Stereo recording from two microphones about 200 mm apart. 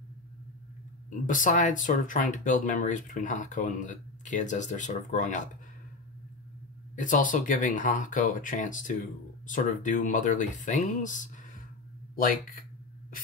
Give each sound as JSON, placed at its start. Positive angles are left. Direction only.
{"t": 1.2, "sound": "speech", "side_deg": 40}
{"t": 7.0, "sound": "speech", "side_deg": 40}